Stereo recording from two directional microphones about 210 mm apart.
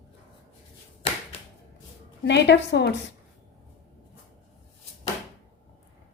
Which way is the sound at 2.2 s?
55° left (ahead or behind).